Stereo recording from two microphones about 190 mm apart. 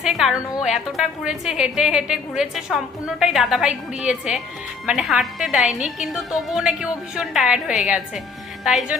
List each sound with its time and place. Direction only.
0.0 s a woman's voice: centre (ahead or behind)